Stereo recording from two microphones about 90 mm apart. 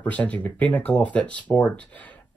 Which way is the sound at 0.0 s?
15° left (ahead or behind).